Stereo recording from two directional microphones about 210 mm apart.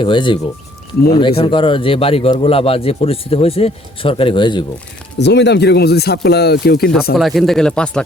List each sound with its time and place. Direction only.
0.0 s speech: 20° left (ahead or behind)
5.1 s speech: 55° left (ahead or behind)
7.2 s speech: centre (ahead or behind)